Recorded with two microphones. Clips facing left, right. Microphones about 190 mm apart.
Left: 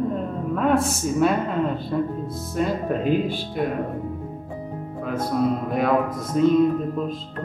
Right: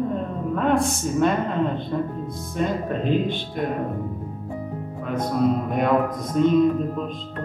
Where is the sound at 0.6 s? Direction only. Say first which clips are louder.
Even; 5° left (ahead or behind).